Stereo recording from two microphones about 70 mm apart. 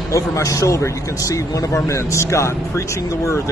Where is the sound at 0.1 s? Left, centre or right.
Left.